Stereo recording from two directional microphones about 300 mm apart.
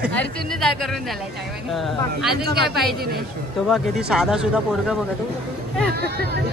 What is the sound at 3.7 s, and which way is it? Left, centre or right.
Speech, centre.